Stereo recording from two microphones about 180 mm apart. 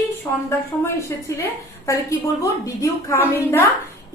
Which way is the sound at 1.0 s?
15° left (ahead or behind).